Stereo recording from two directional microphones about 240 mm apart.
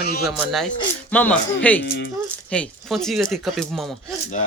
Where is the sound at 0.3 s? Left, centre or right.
Centre.